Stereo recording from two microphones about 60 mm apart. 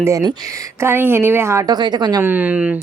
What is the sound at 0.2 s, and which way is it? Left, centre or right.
Speech, right.